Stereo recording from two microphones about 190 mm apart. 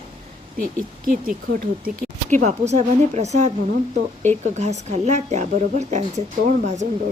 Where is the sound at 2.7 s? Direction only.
35° right (ahead or behind).